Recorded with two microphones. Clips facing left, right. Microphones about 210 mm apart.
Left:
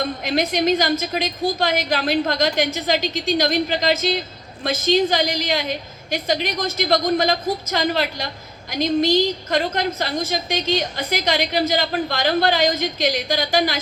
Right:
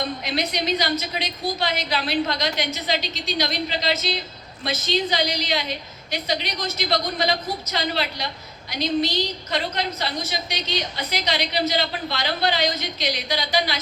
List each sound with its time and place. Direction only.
0.3 s a woman's voice: 50° left (ahead or behind)